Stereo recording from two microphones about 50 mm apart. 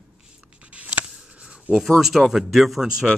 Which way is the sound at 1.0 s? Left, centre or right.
Centre.